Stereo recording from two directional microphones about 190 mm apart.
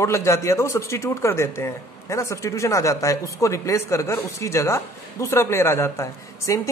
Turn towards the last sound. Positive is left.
turn(degrees=15)  # may be behind; listen again after turning